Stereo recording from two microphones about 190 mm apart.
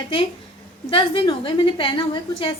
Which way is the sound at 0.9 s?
25° left (ahead or behind).